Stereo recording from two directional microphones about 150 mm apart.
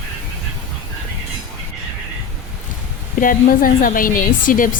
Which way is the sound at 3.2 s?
70° left (ahead or behind).